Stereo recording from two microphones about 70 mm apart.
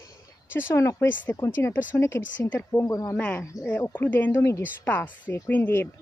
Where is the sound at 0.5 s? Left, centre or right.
Left.